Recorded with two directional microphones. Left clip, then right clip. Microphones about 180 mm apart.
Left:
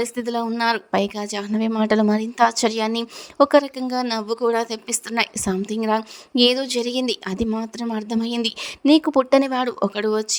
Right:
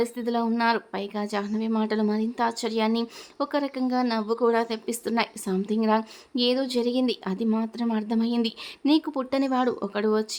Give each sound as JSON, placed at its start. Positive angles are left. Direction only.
{"t": 0.0, "sound": "speech", "side_deg": 35}